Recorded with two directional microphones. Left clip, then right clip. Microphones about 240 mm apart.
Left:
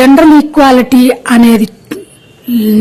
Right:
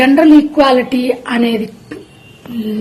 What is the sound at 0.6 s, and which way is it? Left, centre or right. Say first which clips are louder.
Speech: left 5 dB; left.